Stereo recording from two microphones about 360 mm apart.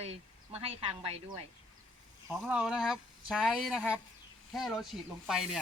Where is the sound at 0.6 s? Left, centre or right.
Centre.